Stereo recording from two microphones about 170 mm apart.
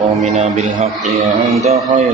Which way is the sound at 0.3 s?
45° right (ahead or behind).